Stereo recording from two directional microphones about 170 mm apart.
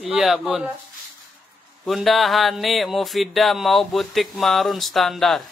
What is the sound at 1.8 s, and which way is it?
Speech, centre (ahead or behind).